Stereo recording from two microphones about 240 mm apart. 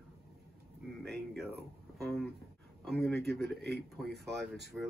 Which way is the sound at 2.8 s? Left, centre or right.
Centre.